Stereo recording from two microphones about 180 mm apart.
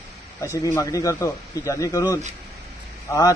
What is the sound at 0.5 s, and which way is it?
A man's voice, 15° left (ahead or behind).